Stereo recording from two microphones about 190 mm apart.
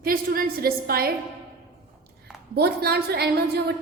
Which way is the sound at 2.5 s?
55° right (ahead or behind).